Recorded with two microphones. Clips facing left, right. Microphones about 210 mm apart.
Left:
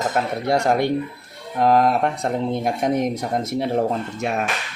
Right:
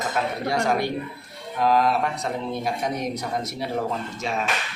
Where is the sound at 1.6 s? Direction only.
55° left (ahead or behind).